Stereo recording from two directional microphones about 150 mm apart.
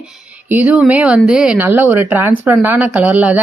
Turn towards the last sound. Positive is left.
turn(degrees=-10)  # may be behind; listen again after turning